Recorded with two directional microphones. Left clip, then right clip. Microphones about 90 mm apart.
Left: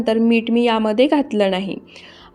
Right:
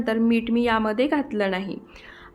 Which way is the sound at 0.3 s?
25° left (ahead or behind).